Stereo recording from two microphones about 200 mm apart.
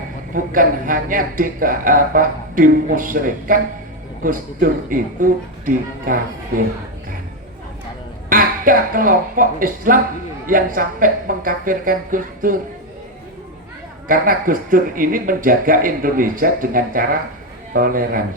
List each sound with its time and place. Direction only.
0.3 s speech: 45° right (ahead or behind)
8.3 s speech: 45° right (ahead or behind)
14.1 s speech: 45° right (ahead or behind)